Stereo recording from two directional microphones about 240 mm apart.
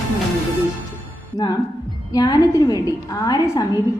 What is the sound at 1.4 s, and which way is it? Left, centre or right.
A woman's voice, centre.